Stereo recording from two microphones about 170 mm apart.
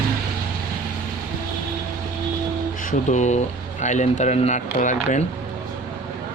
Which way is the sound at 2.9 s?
45° left (ahead or behind).